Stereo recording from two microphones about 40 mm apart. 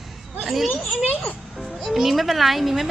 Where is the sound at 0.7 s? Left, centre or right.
Left.